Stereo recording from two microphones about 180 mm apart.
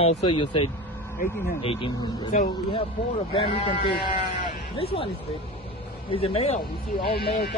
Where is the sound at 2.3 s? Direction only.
45° left (ahead or behind).